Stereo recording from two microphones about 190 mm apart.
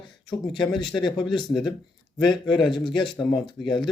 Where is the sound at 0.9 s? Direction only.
25° left (ahead or behind).